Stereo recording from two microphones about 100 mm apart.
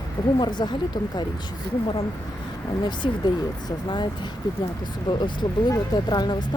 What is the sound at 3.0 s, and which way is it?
Speech, 55° left (ahead or behind).